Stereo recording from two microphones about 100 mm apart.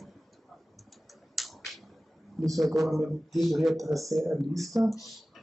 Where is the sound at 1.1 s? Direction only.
Centre (ahead or behind).